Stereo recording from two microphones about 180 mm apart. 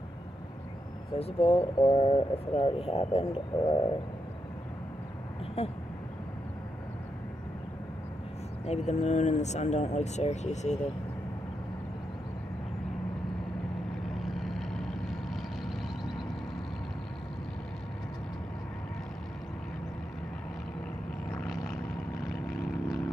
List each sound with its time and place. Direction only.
1.2 s speech: 30° left (ahead or behind)
5.6 s speech: 35° left (ahead or behind)
8.6 s speech: 40° left (ahead or behind)
14.0 s vehicle: centre (ahead or behind)
22.5 s vehicle: centre (ahead or behind)